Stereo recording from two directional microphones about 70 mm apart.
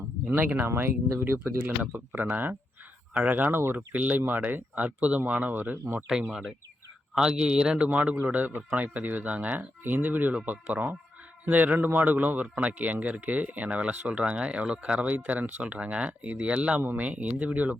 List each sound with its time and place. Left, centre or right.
0.3 s speech: right
1.6 s a man's voice: right
6.1 s a man's voice: centre